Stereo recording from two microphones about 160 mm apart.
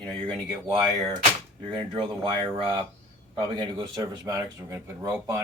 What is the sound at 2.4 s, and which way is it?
Speech, 30° right (ahead or behind).